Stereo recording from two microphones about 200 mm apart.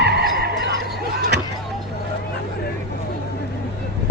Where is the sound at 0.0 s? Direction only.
55° right (ahead or behind).